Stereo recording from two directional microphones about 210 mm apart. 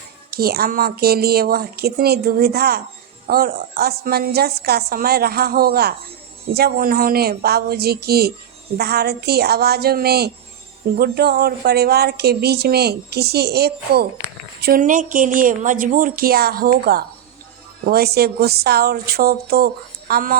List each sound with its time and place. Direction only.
0.3 s speech: 45° right (ahead or behind)